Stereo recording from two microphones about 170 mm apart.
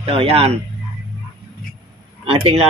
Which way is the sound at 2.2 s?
35° right (ahead or behind).